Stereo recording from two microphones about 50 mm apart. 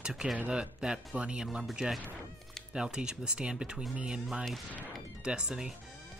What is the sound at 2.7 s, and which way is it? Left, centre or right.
Speech, centre.